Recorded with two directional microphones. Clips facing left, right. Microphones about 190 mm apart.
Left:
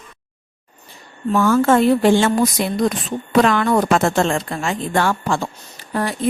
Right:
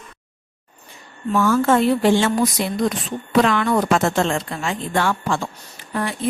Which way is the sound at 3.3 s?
45° left (ahead or behind).